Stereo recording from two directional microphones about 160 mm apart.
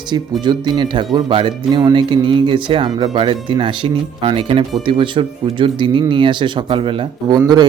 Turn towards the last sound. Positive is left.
turn(degrees=-25)  # may be behind; listen again after turning